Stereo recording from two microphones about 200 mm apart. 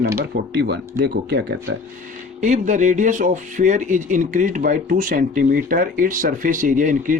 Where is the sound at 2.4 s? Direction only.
35° right (ahead or behind).